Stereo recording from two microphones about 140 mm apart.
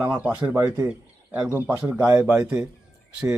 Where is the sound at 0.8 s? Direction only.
10° right (ahead or behind).